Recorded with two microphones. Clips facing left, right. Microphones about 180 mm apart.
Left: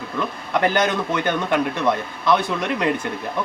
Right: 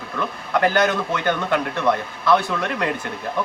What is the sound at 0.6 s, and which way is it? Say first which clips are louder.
Speech: right 1 dB; 20° left (ahead or behind).